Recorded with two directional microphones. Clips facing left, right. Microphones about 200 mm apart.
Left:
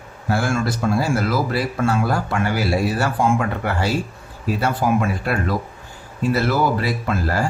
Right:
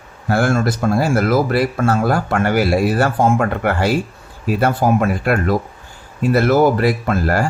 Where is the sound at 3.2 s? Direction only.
45° right (ahead or behind).